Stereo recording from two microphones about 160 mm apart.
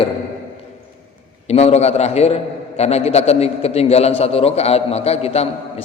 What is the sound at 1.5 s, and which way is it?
A man's voice, 40° left (ahead or behind).